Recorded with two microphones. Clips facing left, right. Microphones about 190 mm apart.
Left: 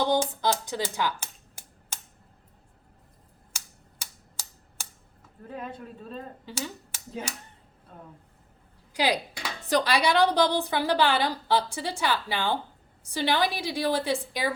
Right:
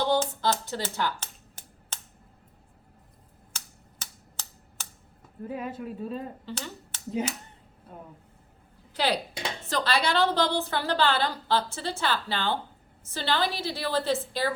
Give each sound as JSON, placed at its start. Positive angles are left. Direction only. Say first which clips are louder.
{"t": 0.0, "sound": "music", "louder": "left 1 dB", "side_deg": 15}
{"t": 3.5, "sound": "typewriter", "louder": "right 1 dB", "side_deg": 10}
{"t": 5.5, "sound": "speech", "louder": "right 4 dB", "side_deg": -5}
{"t": 6.4, "sound": "speech", "louder": "left 1 dB", "side_deg": 10}
{"t": 8.9, "sound": "speech", "louder": "left 1 dB", "side_deg": 10}
{"t": 9.3, "sound": "a sound", "louder": "right 3 dB", "side_deg": -20}
{"t": 9.6, "sound": "a woman's voice", "louder": "left 4 dB", "side_deg": 15}